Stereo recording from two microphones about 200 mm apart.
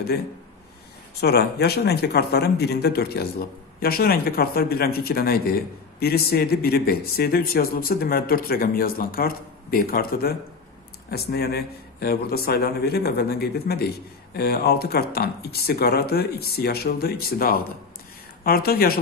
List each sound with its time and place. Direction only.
1.2 s a man's voice: 55° left (ahead or behind)